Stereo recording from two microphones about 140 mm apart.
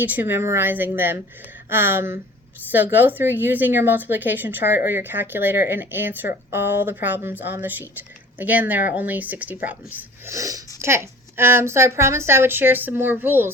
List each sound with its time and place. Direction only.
0.0 s speech: 15° right (ahead or behind)
10.3 s speech: 25° right (ahead or behind)